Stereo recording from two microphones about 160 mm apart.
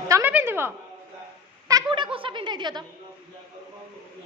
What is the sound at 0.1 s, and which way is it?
Speech, 10° right (ahead or behind).